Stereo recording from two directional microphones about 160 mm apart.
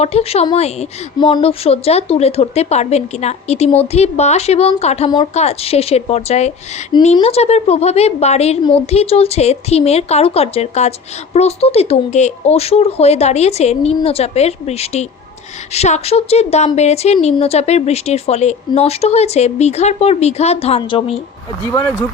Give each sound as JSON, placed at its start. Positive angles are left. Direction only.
{"t": 0.0, "sound": "speech", "side_deg": 40}